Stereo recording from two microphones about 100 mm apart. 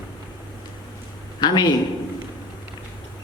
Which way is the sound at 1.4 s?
45° left (ahead or behind).